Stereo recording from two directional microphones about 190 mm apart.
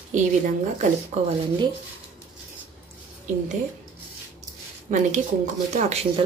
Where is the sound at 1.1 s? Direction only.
40° right (ahead or behind).